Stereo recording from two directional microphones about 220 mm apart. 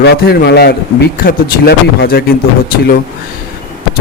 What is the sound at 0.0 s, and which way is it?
A man's voice, 50° left (ahead or behind).